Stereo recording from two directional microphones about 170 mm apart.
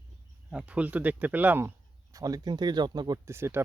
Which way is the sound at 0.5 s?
10° right (ahead or behind).